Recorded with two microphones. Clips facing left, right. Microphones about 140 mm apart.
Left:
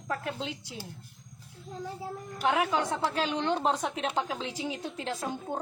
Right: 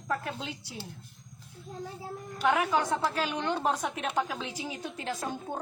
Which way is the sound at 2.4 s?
25° left (ahead or behind).